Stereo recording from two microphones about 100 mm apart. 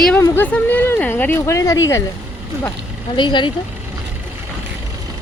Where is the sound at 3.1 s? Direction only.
50° left (ahead or behind).